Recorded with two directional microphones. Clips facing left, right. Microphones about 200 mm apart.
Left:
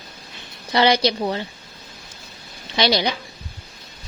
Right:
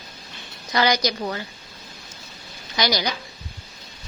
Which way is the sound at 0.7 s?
30° left (ahead or behind).